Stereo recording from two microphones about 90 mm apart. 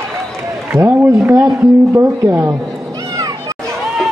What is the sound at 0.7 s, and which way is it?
A man's voice, 25° right (ahead or behind).